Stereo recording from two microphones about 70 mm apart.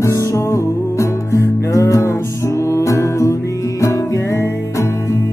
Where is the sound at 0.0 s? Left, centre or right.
Left.